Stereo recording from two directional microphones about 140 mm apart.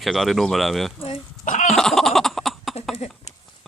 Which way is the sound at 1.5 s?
55° left (ahead or behind).